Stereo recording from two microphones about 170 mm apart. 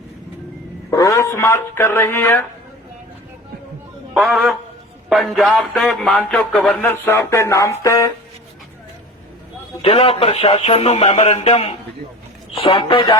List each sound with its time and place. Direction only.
0.9 s speech: 20° left (ahead or behind)
4.1 s speech: 5° right (ahead or behind)
6.8 s speech: 15° left (ahead or behind)
9.8 s speech: 35° left (ahead or behind)